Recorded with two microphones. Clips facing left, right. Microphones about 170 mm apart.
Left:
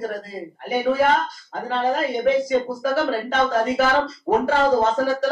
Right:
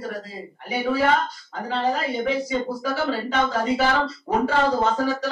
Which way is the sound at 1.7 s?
50° left (ahead or behind).